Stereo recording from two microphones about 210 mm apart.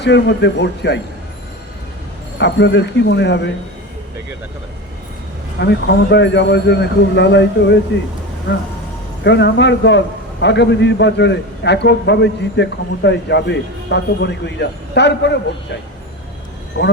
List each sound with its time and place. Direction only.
0.0 s a man's voice: 55° left (ahead or behind)
2.4 s a man's voice: 55° left (ahead or behind)
5.5 s a man's voice: 55° left (ahead or behind)
9.2 s a man's voice: 55° left (ahead or behind)
16.8 s speech: 50° left (ahead or behind)